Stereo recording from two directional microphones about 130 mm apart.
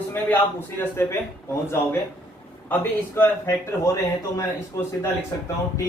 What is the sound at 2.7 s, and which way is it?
A man's voice, 15° left (ahead or behind).